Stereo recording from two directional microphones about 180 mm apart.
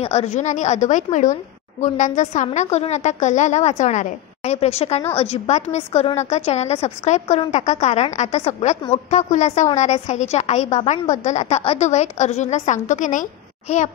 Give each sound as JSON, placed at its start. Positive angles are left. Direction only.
{"t": 0.0, "sound": "a woman's voice", "side_deg": 35}